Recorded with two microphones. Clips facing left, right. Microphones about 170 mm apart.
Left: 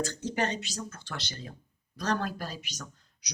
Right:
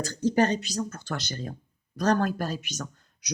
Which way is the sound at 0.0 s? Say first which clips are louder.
Right 7 dB; 40° right (ahead or behind).